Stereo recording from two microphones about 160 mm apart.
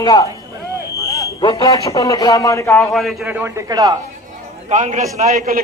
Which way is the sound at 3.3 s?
15° right (ahead or behind).